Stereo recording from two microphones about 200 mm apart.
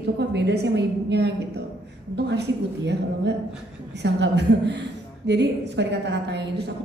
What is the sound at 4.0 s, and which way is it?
A woman's voice, 60° right (ahead or behind).